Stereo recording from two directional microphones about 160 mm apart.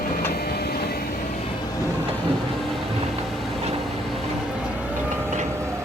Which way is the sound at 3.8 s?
Centre (ahead or behind).